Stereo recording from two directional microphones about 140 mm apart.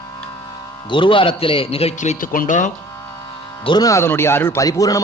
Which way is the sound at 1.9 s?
60° left (ahead or behind).